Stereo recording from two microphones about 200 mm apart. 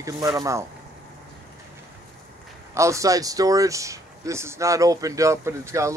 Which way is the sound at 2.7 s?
15° right (ahead or behind).